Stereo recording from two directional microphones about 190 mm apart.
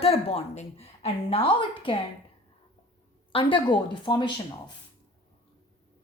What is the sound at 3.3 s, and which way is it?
Speech, 25° left (ahead or behind).